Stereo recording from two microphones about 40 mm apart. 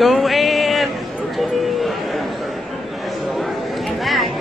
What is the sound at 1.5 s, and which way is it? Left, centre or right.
Chatter, centre.